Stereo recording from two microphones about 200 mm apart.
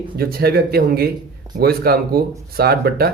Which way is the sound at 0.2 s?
50° right (ahead or behind).